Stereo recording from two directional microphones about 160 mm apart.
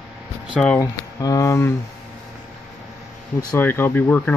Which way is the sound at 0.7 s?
20° left (ahead or behind).